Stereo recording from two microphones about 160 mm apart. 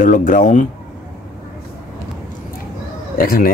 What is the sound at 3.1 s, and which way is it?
Speech, 65° left (ahead or behind).